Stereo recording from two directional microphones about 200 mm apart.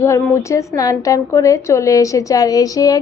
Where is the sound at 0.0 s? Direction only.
15° left (ahead or behind).